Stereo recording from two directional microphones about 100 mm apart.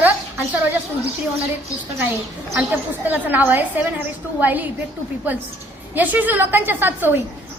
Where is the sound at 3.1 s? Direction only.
15° right (ahead or behind).